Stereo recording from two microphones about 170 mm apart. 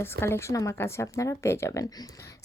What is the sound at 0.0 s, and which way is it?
A woman's voice, 15° left (ahead or behind).